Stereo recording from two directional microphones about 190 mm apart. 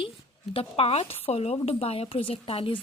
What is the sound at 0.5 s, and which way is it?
A woman's voice, 30° left (ahead or behind).